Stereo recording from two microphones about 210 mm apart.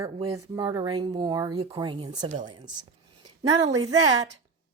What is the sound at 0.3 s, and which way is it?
A woman's voice, 15° right (ahead or behind).